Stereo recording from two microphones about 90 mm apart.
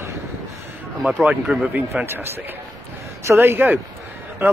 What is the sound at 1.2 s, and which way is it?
A man's voice, 10° right (ahead or behind).